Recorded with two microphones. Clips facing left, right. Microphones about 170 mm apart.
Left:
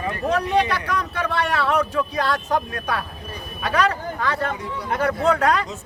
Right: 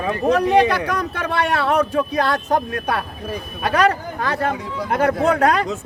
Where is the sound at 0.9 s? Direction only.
45° right (ahead or behind).